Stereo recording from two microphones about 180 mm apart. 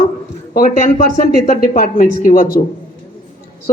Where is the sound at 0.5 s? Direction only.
45° left (ahead or behind).